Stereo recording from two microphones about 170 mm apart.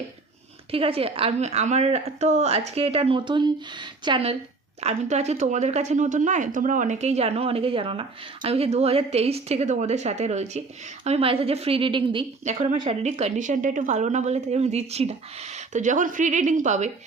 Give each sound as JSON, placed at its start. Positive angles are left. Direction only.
{"t": 0.7, "sound": "a woman's voice", "side_deg": -35}
{"t": 12.4, "sound": "a woman's voice", "side_deg": -45}